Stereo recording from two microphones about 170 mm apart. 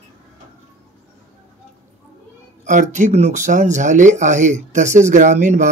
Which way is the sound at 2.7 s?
45° right (ahead or behind).